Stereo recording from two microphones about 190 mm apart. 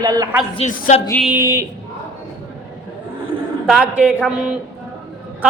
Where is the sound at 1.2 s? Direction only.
10° right (ahead or behind).